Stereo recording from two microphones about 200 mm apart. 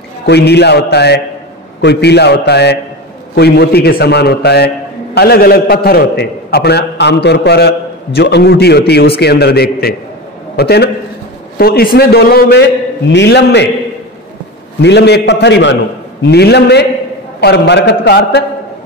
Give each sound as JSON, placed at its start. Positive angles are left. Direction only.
{"t": 0.3, "sound": "a man's voice", "side_deg": 55}
{"t": 14.8, "sound": "a man's voice", "side_deg": 55}